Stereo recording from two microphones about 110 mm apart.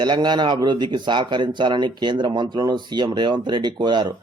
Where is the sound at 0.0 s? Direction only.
40° right (ahead or behind).